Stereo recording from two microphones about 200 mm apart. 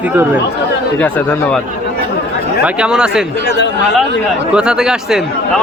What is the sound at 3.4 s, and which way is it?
Speech, 60° left (ahead or behind).